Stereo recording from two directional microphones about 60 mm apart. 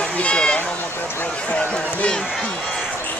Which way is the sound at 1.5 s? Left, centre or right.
Centre.